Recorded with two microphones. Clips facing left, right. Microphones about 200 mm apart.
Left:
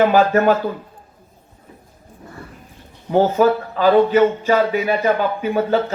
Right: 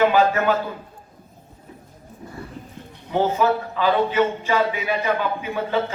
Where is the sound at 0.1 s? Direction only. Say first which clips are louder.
Left 4 dB; 40° left (ahead or behind).